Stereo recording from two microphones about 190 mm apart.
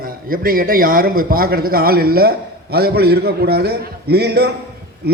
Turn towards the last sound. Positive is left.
turn(degrees=-55)  # may be behind; listen again after turning